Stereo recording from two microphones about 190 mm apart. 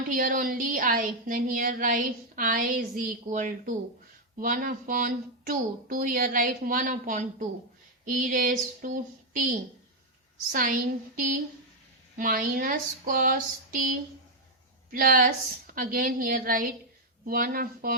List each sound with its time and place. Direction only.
0.1 s a woman's voice: 45° right (ahead or behind)
14.8 s a woman's voice: 50° right (ahead or behind)